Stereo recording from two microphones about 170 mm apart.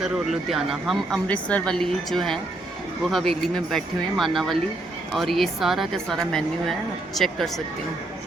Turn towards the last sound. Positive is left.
turn(degrees=0)  # may be behind; listen again after turning